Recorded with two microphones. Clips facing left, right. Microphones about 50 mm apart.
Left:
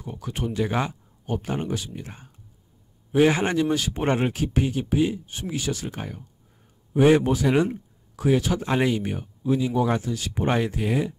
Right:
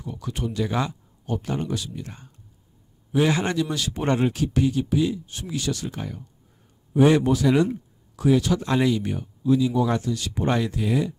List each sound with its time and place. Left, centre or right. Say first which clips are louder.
0.0 s speech: even; left
5.3 s speech: even; left